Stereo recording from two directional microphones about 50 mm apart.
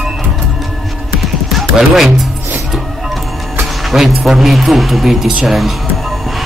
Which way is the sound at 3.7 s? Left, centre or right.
Centre.